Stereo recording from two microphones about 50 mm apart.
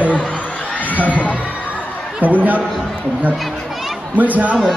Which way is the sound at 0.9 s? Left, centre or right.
Left.